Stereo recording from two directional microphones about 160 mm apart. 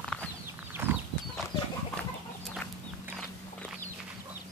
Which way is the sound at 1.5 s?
25° left (ahead or behind).